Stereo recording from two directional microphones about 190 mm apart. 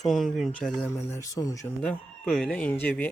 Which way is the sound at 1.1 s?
20° left (ahead or behind).